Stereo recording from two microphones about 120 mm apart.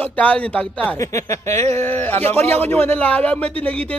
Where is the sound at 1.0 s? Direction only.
25° left (ahead or behind).